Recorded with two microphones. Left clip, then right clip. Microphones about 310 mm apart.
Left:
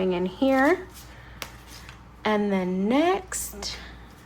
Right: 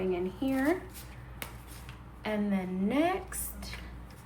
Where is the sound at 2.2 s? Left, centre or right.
Centre.